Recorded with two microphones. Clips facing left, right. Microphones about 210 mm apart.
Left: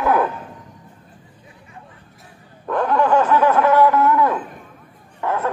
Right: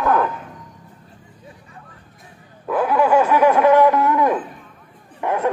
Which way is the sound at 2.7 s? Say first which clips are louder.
Right 1 dB; 5° right (ahead or behind).